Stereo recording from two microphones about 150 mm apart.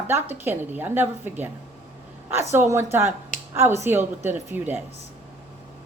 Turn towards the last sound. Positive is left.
turn(degrees=-15)  # may be behind; listen again after turning